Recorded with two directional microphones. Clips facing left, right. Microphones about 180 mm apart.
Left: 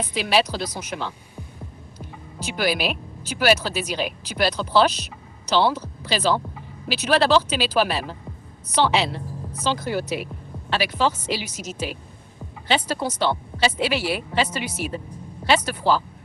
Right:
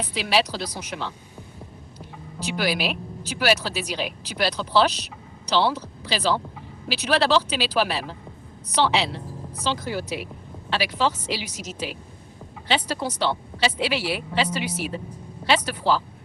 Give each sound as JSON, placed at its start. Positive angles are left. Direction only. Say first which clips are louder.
{"t": 0.1, "sound": "speech", "louder": "left 2 dB", "side_deg": 50}
{"t": 2.4, "sound": "speech", "louder": "left 1 dB", "side_deg": 50}